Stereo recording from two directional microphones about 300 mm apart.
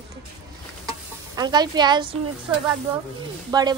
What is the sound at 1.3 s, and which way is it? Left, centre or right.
A woman's voice, centre.